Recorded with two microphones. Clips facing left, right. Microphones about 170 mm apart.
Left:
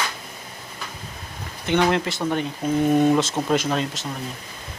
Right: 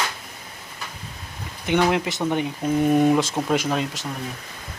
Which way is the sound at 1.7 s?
10° right (ahead or behind).